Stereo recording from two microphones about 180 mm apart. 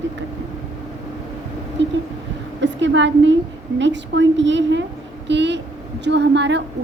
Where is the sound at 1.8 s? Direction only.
80° right.